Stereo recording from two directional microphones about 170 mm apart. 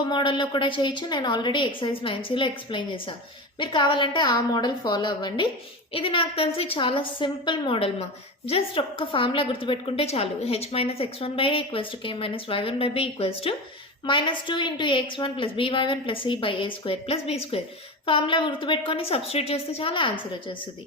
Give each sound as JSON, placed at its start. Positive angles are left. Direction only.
{"t": 0.1, "sound": "a woman's voice", "side_deg": 30}